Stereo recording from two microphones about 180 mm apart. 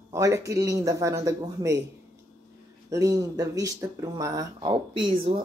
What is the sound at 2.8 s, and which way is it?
Speech, 20° right (ahead or behind).